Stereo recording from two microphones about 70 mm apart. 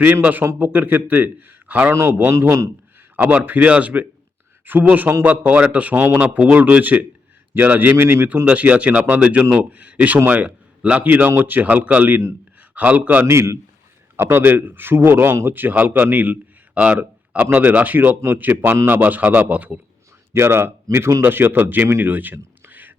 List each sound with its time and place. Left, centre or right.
0.2 s a man's voice: right
1.9 s a man's voice: right
13.2 s a man's voice: right
20.3 s a man's voice: right
22.0 s a sound: right